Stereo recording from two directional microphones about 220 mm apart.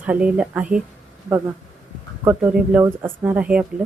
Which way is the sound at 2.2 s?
5° right (ahead or behind).